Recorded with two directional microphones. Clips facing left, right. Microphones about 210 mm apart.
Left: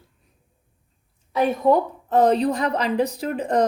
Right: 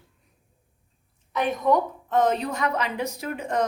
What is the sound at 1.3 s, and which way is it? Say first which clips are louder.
A woman's voice: left 4 dB; 30° left (ahead or behind).